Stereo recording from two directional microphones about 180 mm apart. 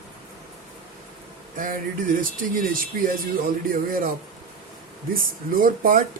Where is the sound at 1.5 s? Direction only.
50° right (ahead or behind).